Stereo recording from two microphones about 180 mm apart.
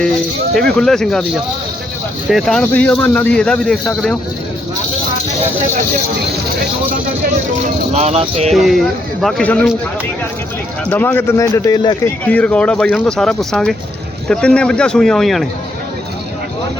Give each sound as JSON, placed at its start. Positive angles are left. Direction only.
{"t": 0.8, "sound": "speech", "side_deg": 5}
{"t": 2.3, "sound": "speech", "side_deg": 5}
{"t": 7.9, "sound": "speech", "side_deg": -35}
{"t": 8.5, "sound": "speech", "side_deg": 0}
{"t": 10.8, "sound": "speech", "side_deg": 10}
{"t": 12.2, "sound": "speech", "side_deg": 10}